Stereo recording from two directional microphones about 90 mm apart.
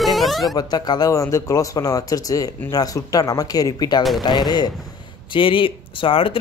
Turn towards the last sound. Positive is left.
turn(degrees=80)